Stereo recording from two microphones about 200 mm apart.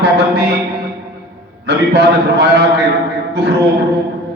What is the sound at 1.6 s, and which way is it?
A man's voice, 55° right (ahead or behind).